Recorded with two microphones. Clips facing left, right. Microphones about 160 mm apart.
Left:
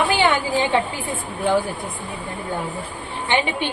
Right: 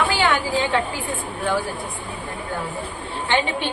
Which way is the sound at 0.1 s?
20° left (ahead or behind).